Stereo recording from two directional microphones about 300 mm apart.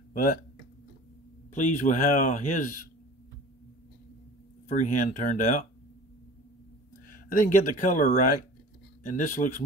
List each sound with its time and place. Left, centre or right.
0.1 s speech: left
1.5 s speech: left
4.6 s speech: left
7.1 s speech: left